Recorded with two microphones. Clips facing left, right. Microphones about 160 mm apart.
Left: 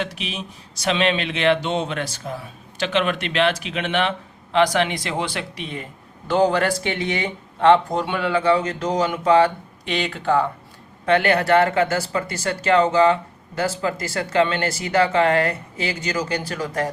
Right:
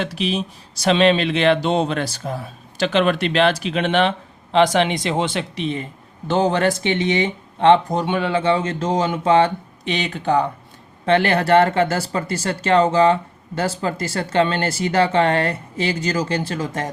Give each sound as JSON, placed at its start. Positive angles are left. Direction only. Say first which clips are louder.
{"t": 0.0, "sound": "speech", "louder": "right 6 dB", "side_deg": -35}
{"t": 4.5, "sound": "speech", "louder": "right 3 dB", "side_deg": -25}
{"t": 11.0, "sound": "speech", "louder": "right 1 dB", "side_deg": -30}